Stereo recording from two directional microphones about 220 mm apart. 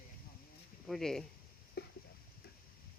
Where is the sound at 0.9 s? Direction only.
Centre (ahead or behind).